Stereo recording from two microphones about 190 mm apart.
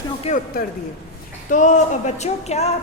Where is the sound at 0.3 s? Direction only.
35° left (ahead or behind).